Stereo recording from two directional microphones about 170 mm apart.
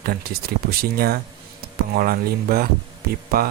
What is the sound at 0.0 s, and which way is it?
Speech, 65° right (ahead or behind).